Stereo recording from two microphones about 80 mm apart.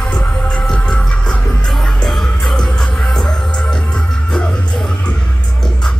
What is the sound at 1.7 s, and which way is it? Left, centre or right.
Music, centre.